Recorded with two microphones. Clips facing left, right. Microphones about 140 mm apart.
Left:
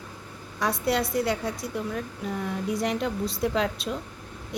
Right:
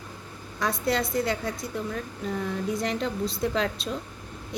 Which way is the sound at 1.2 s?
10° left (ahead or behind).